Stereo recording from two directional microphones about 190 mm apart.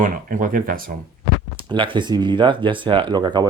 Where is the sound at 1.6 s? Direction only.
25° right (ahead or behind).